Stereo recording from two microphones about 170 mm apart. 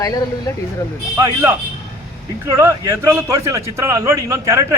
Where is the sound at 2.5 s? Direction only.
15° right (ahead or behind).